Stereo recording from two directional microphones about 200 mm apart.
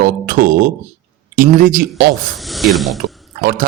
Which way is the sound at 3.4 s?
45° right (ahead or behind).